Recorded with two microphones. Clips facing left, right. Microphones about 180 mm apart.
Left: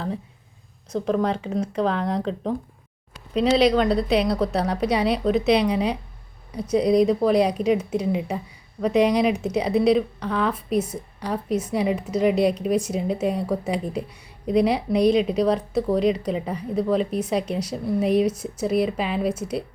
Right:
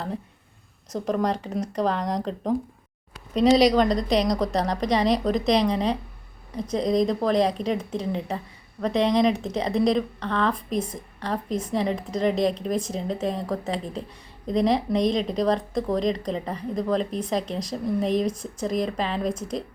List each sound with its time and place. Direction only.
0.9 s speech: centre (ahead or behind)